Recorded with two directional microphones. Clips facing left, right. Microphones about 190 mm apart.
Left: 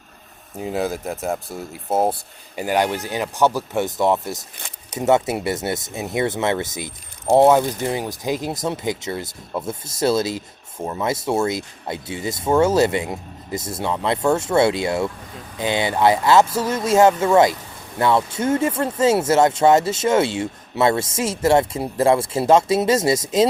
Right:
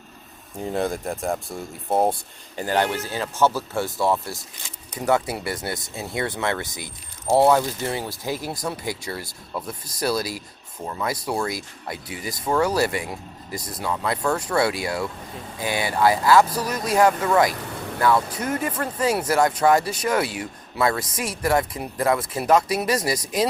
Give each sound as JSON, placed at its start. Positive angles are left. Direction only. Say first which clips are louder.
{"t": 0.6, "sound": "speech", "louder": "left 1 dB", "side_deg": 5}
{"t": 2.6, "sound": "speech", "louder": "left 2 dB", "side_deg": 15}
{"t": 17.5, "sound": "vehicle", "louder": "right 4 dB", "side_deg": -70}
{"t": 18.0, "sound": "speech", "louder": "left 3 dB", "side_deg": 25}